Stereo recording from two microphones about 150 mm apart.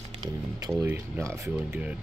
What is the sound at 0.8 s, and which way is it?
Speech, 20° right (ahead or behind).